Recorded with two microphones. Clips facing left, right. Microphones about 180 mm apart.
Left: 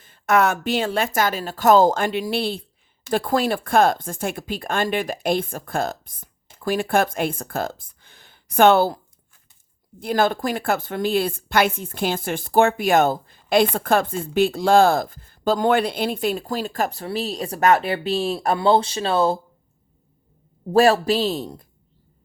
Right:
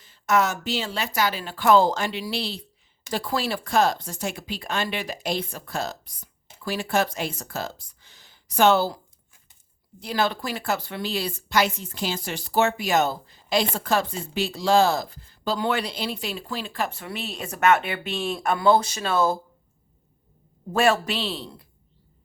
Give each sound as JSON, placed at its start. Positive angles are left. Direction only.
{"t": 0.0, "sound": "speech", "side_deg": 55}
{"t": 10.0, "sound": "speech", "side_deg": 50}
{"t": 20.7, "sound": "a man's voice", "side_deg": 35}